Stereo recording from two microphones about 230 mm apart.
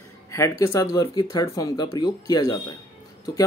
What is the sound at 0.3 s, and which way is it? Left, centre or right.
Speech, centre.